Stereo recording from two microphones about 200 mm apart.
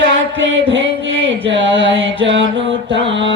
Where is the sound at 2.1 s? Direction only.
65° right (ahead or behind).